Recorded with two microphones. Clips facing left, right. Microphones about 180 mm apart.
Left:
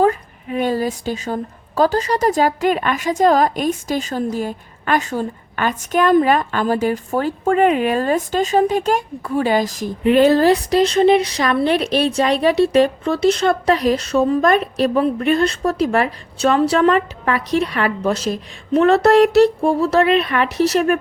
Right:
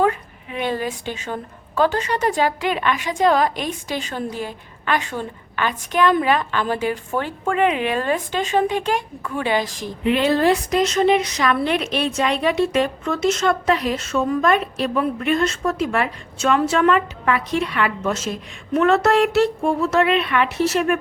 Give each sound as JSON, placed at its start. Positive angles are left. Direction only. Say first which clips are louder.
{"t": 0.0, "sound": "a woman's voice", "louder": "left 3 dB", "side_deg": 40}